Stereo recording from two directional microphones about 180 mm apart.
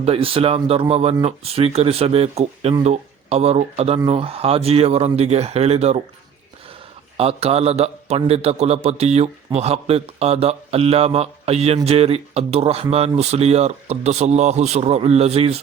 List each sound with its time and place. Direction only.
0.0 s a man's voice: 30° right (ahead or behind)
7.2 s a man's voice: 35° right (ahead or behind)